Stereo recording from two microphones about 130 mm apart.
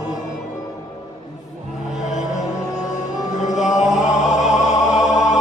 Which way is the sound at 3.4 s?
70° left (ahead or behind).